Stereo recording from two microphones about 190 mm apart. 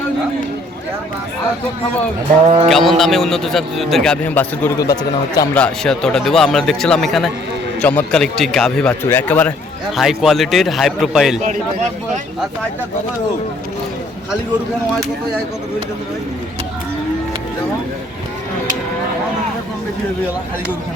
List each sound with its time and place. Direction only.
2.6 s a man's voice: centre (ahead or behind)
4.9 s speech: 20° left (ahead or behind)
5.5 s a man's voice: 5° left (ahead or behind)
9.9 s a man's voice: centre (ahead or behind)